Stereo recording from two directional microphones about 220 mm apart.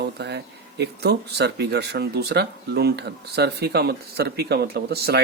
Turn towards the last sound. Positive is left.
turn(degrees=-45)  # may be behind; listen again after turning